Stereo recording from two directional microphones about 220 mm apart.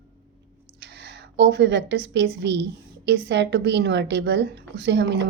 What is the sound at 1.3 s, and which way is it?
A woman's voice, 50° right (ahead or behind).